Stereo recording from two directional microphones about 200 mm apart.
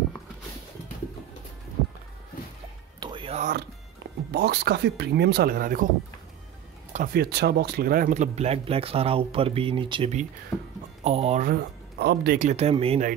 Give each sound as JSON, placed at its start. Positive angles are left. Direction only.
{"t": 3.0, "sound": "music", "side_deg": -25}
{"t": 4.3, "sound": "speech", "side_deg": -55}
{"t": 6.9, "sound": "speech", "side_deg": -45}
{"t": 11.4, "sound": "speech", "side_deg": -55}
{"t": 12.4, "sound": "speech", "side_deg": -35}